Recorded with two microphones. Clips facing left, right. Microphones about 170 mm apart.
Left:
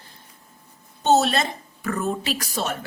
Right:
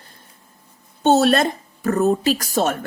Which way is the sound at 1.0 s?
55° right (ahead or behind).